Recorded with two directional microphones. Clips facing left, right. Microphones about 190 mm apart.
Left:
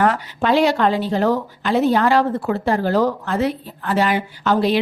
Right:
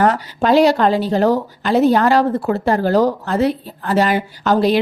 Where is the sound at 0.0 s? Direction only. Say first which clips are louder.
Right 3 dB; 40° right (ahead or behind).